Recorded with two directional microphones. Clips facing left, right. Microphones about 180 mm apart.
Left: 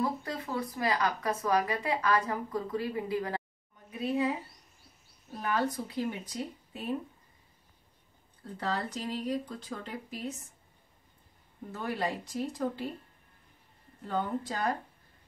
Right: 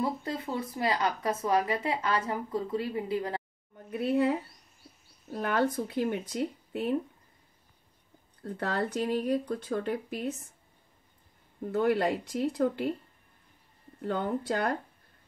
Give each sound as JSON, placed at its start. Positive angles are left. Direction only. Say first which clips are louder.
{"t": 0.0, "sound": "speech", "louder": "right 1 dB", "side_deg": -25}
{"t": 3.7, "sound": "speech", "louder": "right 4 dB", "side_deg": -60}
{"t": 5.4, "sound": "speech", "louder": "right 3 dB", "side_deg": -55}
{"t": 8.5, "sound": "speech", "louder": "right 4 dB", "side_deg": -55}
{"t": 11.7, "sound": "speech", "louder": "right 8 dB", "side_deg": -65}
{"t": 14.0, "sound": "speech", "louder": "right 3 dB", "side_deg": -60}